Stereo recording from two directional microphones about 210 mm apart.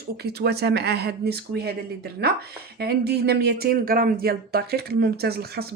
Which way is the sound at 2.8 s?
50° right (ahead or behind).